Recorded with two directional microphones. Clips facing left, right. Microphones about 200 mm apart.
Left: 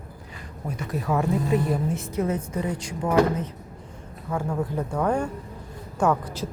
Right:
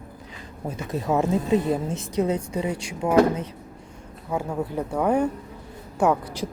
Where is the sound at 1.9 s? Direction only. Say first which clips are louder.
Left 1 dB; 85° right.